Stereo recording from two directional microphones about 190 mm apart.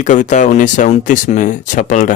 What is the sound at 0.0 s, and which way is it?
Speech, 40° left (ahead or behind).